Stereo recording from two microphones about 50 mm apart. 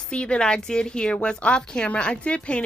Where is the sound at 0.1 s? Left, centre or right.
Left.